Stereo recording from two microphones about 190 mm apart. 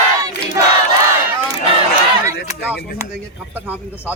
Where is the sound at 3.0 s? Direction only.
15° right (ahead or behind).